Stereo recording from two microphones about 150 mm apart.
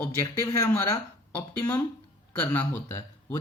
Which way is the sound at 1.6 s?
10° left (ahead or behind).